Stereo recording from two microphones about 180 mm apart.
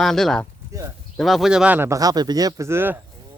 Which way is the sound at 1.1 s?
Centre (ahead or behind).